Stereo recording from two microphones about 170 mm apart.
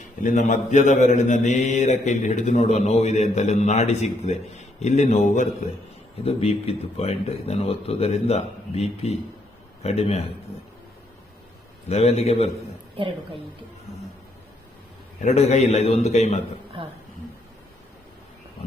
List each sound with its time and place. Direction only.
0.0 s mantra: 45° left (ahead or behind)
6.2 s speech: 35° left (ahead or behind)
11.9 s speech: 40° left (ahead or behind)
15.2 s speech: 40° left (ahead or behind)